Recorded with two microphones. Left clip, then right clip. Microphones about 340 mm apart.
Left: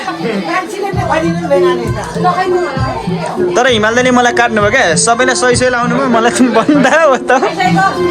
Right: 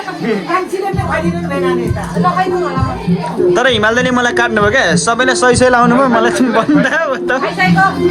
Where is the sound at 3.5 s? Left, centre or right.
Centre.